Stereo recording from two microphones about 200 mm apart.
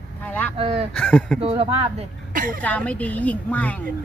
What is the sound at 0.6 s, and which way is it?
Speech, 30° right (ahead or behind).